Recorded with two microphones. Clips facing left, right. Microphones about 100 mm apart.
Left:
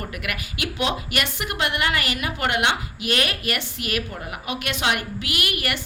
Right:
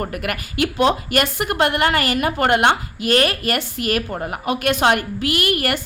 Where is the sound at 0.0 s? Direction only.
40° right (ahead or behind).